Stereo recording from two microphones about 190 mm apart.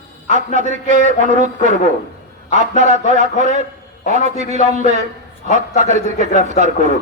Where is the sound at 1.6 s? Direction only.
40° left (ahead or behind).